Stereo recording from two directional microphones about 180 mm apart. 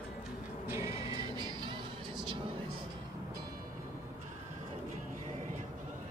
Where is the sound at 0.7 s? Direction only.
15° right (ahead or behind).